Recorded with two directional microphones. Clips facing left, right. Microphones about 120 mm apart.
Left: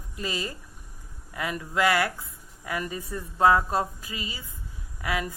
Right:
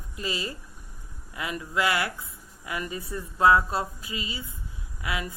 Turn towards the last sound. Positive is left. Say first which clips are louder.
# left 3 dB
turn(degrees=45)  # may be behind; listen again after turning